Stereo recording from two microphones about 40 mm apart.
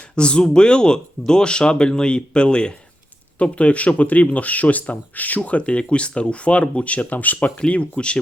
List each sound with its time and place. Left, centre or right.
0.2 s speech: left
5.4 s speech: left
7.6 s speech: left